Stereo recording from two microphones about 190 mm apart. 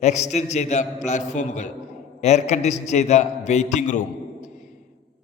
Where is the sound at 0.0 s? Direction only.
35° left (ahead or behind).